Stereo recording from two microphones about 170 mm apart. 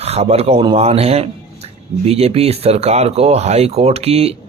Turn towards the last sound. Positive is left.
turn(degrees=-35)  # may be behind; listen again after turning